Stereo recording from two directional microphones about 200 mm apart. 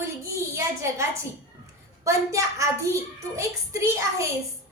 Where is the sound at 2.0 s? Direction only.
15° right (ahead or behind).